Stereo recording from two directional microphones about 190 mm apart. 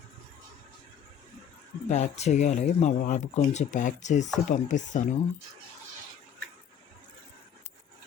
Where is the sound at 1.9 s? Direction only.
35° left (ahead or behind).